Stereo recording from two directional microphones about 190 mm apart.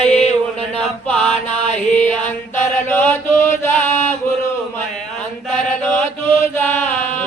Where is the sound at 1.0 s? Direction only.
10° left (ahead or behind).